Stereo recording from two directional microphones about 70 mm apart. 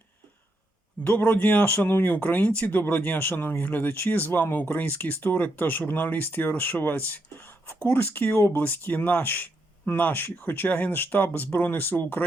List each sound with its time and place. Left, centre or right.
1.0 s speech: left